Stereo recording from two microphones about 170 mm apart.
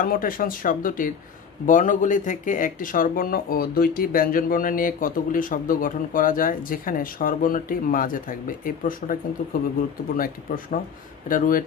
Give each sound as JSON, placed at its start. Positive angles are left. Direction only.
{"t": 0.0, "sound": "speech", "side_deg": 55}